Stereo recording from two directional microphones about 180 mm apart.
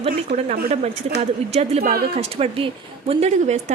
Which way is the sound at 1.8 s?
55° right (ahead or behind).